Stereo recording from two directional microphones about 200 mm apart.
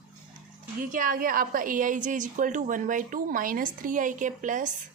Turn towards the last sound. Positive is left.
turn(degrees=-40)  # may be behind; listen again after turning